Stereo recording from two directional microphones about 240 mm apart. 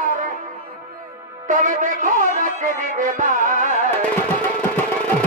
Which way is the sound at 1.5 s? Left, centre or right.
Right.